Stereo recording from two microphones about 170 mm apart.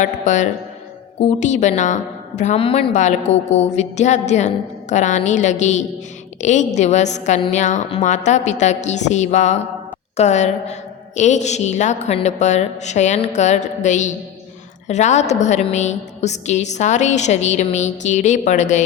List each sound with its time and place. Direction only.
0.0 s a woman's voice: 45° left (ahead or behind)